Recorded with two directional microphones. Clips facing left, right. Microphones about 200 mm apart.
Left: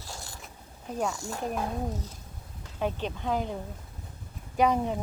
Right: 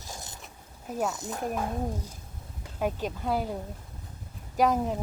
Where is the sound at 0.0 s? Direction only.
20° right (ahead or behind).